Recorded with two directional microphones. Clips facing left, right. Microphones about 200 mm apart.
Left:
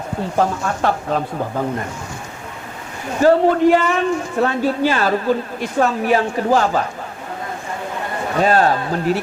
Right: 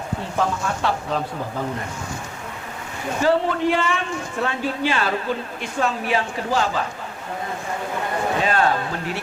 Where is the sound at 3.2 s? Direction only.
45° left (ahead or behind).